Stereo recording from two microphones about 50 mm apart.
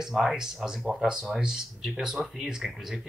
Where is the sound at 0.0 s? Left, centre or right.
Centre.